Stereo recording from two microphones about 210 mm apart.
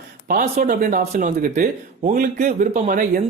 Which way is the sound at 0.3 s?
35° right (ahead or behind).